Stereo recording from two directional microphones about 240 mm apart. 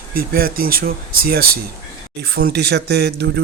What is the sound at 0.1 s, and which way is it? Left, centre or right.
Speech, right.